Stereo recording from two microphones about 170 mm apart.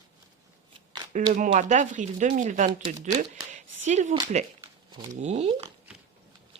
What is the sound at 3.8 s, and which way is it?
Speech, 45° right (ahead or behind).